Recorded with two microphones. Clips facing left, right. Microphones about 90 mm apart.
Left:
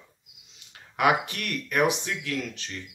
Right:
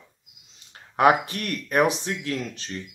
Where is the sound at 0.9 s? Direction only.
35° right (ahead or behind).